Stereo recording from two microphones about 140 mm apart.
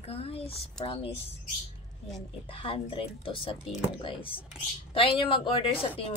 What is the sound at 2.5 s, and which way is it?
A woman's voice, 40° left (ahead or behind).